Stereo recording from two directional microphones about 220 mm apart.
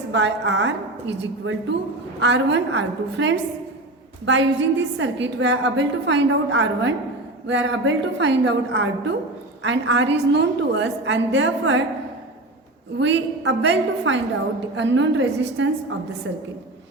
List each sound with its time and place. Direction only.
0.1 s a woman's voice: 55° right (ahead or behind)
13.0 s a woman's voice: 55° right (ahead or behind)